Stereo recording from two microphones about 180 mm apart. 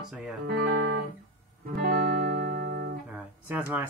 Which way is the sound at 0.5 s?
60° right (ahead or behind).